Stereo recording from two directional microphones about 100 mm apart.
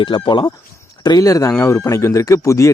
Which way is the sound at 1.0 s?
40° left (ahead or behind).